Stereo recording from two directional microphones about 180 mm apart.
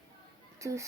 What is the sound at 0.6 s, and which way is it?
Speech, 15° right (ahead or behind).